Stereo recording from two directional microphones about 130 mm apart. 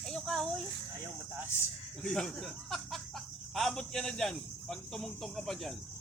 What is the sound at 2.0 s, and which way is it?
Speech, 5° left (ahead or behind).